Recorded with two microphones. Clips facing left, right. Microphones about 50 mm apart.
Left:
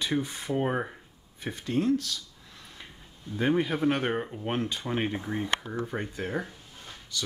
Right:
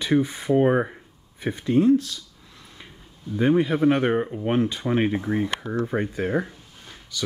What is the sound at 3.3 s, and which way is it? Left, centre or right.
Speech, centre.